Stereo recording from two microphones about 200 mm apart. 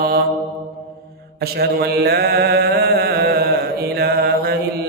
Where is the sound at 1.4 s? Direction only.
50° right (ahead or behind).